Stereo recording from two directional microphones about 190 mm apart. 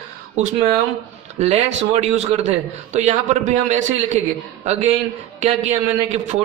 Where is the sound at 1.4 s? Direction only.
35° right (ahead or behind).